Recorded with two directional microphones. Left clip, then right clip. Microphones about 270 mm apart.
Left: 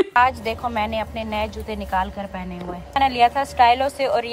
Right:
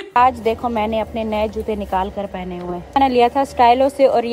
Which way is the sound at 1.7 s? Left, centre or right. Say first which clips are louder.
Right 3 dB; left.